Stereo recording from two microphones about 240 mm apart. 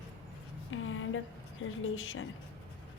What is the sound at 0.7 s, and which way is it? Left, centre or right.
Music, left.